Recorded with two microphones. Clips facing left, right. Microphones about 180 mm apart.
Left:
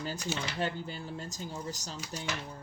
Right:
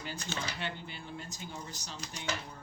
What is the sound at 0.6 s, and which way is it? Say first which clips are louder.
Speech: left 6 dB; 40° left (ahead or behind).